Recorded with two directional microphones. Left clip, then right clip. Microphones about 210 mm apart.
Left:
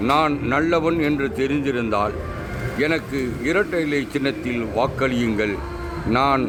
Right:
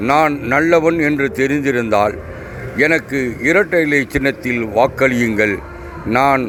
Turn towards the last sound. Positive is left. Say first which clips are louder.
# right 5 dB
turn(degrees=-15)  # may be behind; listen again after turning